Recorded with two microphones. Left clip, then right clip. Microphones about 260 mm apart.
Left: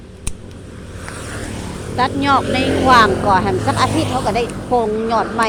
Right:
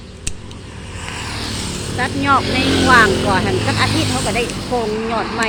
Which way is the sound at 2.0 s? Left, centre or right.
Centre.